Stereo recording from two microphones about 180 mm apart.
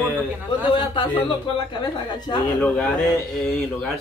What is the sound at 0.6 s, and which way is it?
Speech, 25° left (ahead or behind).